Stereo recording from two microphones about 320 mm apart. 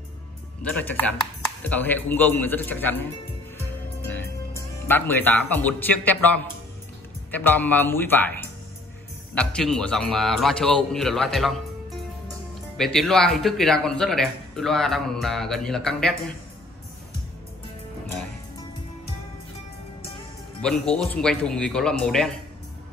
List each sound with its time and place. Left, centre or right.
0.6 s speech: centre
3.5 s music: centre
7.2 s speech: centre
12.7 s speech: centre
20.6 s speech: centre